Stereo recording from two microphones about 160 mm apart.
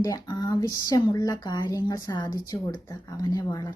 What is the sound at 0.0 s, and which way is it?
Speech, 25° left (ahead or behind).